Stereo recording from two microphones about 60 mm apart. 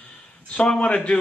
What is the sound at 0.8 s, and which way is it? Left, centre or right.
Speech, centre.